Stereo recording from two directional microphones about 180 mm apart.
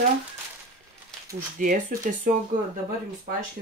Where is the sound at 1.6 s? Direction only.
45° right (ahead or behind).